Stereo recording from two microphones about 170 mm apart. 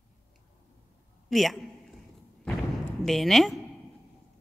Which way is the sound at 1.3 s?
Centre (ahead or behind).